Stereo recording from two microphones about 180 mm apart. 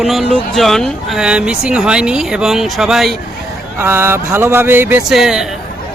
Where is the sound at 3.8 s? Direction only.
15° right (ahead or behind).